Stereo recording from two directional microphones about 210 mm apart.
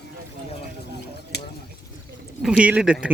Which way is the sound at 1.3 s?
50° left (ahead or behind).